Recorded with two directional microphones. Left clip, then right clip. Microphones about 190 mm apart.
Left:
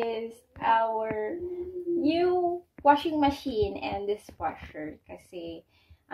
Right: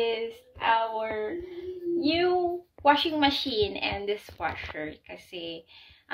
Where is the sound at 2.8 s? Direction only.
20° right (ahead or behind).